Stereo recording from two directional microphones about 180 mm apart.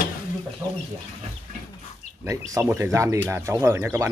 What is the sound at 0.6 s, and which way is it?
Speech, 15° right (ahead or behind).